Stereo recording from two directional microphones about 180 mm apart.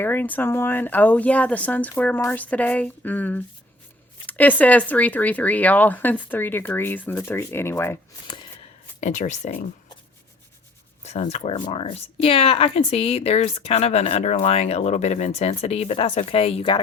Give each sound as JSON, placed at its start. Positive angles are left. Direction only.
{"t": 0.0, "sound": "speech", "side_deg": 10}
{"t": 9.0, "sound": "speech", "side_deg": 40}
{"t": 11.0, "sound": "speech", "side_deg": 40}